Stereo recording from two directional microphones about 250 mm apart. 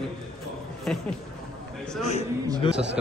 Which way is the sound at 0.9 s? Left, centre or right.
Centre.